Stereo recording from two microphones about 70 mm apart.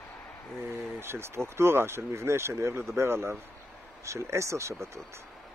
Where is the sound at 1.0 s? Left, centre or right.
Right.